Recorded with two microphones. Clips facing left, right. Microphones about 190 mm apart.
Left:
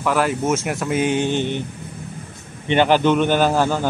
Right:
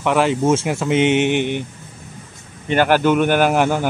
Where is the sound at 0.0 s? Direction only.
25° right (ahead or behind).